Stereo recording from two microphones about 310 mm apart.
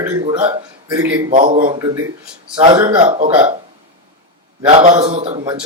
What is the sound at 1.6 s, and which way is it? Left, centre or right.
A man's voice, centre.